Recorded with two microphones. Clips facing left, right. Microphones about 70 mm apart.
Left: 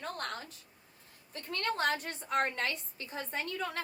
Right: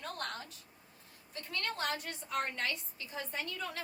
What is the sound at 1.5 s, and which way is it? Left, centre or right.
A woman's voice, left.